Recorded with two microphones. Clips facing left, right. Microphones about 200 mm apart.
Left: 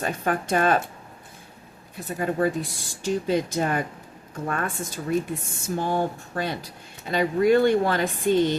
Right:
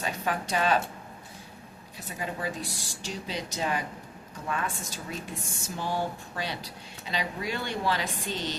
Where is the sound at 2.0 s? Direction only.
55° left (ahead or behind).